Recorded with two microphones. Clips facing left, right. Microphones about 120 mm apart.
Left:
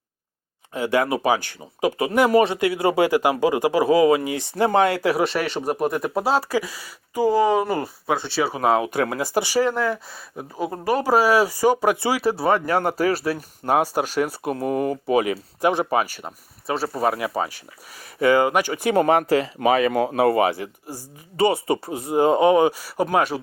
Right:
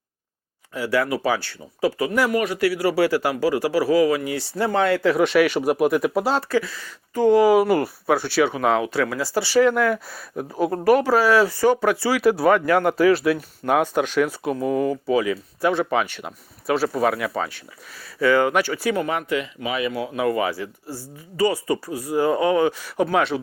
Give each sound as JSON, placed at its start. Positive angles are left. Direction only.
{"t": 0.7, "sound": "speech", "side_deg": 20}
{"t": 5.3, "sound": "speech", "side_deg": 30}
{"t": 5.8, "sound": "speech", "side_deg": 0}
{"t": 6.5, "sound": "speech", "side_deg": 10}
{"t": 7.8, "sound": "speech", "side_deg": 20}
{"t": 8.5, "sound": "speech", "side_deg": 35}
{"t": 8.8, "sound": "speech", "side_deg": 20}
{"t": 9.6, "sound": "speech", "side_deg": 30}
{"t": 12.2, "sound": "speech", "side_deg": 30}
{"t": 15.8, "sound": "speech", "side_deg": 45}
{"t": 16.0, "sound": "speech", "side_deg": 5}
{"t": 18.9, "sound": "speech", "side_deg": 35}
{"t": 20.1, "sound": "speech", "side_deg": 35}